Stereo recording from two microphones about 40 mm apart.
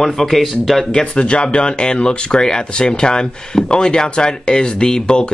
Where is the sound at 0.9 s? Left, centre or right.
Left.